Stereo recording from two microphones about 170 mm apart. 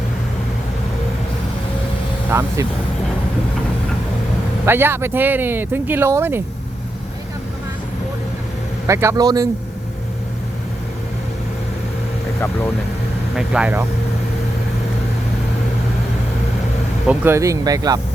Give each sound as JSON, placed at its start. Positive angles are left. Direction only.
{"t": 4.6, "sound": "speech", "side_deg": -15}
{"t": 8.9, "sound": "speech", "side_deg": -15}
{"t": 13.3, "sound": "speech", "side_deg": -5}
{"t": 17.1, "sound": "speech", "side_deg": -15}